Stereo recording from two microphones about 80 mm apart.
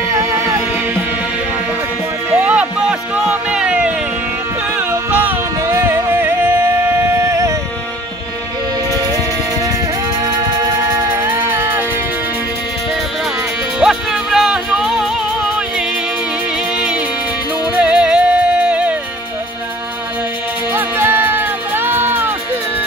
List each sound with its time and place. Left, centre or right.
0.1 s music: right
2.3 s music: centre
5.1 s music: right
10.9 s music: right
13.7 s music: centre
16.7 s music: centre
20.7 s music: right